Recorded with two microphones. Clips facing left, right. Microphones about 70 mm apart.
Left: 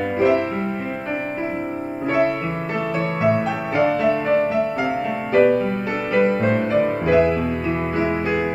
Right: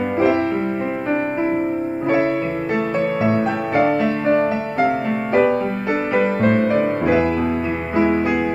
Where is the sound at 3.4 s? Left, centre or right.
Right.